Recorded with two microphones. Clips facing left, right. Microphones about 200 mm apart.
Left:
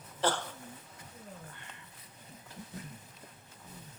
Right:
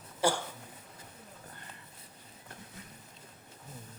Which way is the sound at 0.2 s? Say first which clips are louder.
Right 2 dB; 10° right (ahead or behind).